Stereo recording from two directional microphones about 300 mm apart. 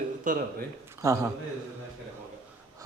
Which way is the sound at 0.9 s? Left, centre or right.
Centre.